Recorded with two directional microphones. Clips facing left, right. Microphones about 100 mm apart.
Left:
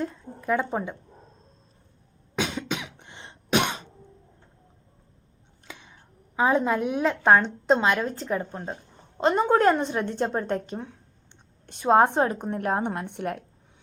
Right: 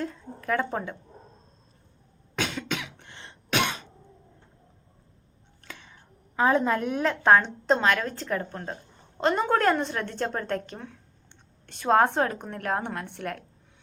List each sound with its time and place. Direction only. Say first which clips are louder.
0.0 s speech: left 2 dB; 10° left (ahead or behind)
2.3 s cough: left 2 dB; 15° left (ahead or behind)
5.6 s a woman's voice: even; 10° left (ahead or behind)